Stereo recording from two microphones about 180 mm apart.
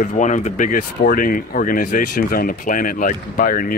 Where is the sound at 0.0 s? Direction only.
45° left (ahead or behind).